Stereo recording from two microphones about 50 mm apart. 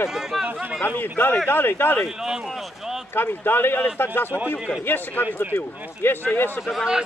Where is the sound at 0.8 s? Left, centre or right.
Left.